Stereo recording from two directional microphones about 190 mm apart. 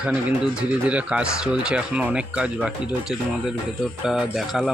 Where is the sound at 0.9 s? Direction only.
5° right (ahead or behind).